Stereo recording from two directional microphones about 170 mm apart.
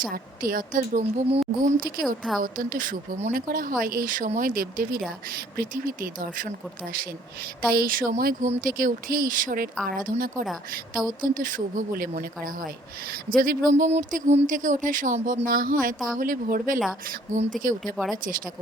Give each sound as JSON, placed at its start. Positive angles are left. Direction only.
{"t": 0.0, "sound": "speech", "side_deg": -55}
{"t": 1.3, "sound": "speech", "side_deg": -40}
{"t": 1.8, "sound": "speech", "side_deg": -55}
{"t": 7.7, "sound": "speech", "side_deg": -60}
{"t": 13.7, "sound": "speech", "side_deg": -45}
{"t": 17.9, "sound": "speech", "side_deg": 0}